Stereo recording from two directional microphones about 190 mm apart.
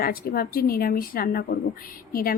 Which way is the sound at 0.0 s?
50° left (ahead or behind).